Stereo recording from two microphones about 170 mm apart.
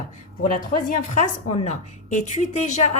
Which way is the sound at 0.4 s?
50° left (ahead or behind).